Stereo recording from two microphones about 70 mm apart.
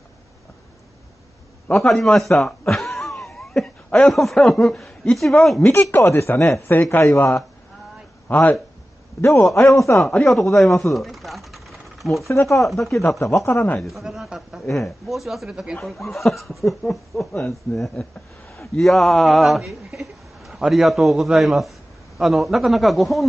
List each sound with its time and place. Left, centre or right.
1.7 s a man's voice: centre
2.0 s a sound: centre
4.1 s a man's voice: centre
6.1 s speech: left
8.3 s speech: left
9.2 s speech: left
9.9 s a man's voice: centre
10.9 s sewing machine: centre
12.3 s speech: left
12.6 s a man's voice: centre
13.2 s speech: left
13.7 s a man's voice: centre